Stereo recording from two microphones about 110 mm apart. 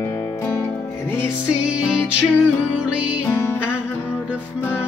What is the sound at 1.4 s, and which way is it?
Music, 10° right (ahead or behind).